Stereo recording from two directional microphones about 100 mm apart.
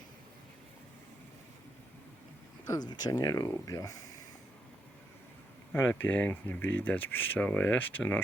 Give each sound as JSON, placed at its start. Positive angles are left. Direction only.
{"t": 2.6, "sound": "speech", "side_deg": 45}
{"t": 5.7, "sound": "speech", "side_deg": 20}